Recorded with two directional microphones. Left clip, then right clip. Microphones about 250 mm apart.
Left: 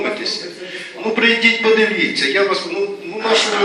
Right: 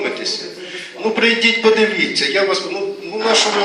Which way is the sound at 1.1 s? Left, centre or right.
Right.